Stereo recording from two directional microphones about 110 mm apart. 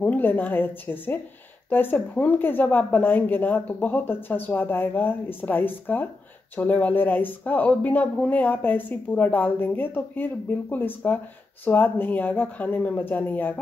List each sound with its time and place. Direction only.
0.0 s speech: 15° left (ahead or behind)